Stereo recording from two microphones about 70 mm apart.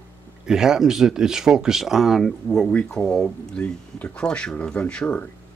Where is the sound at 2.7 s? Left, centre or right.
Centre.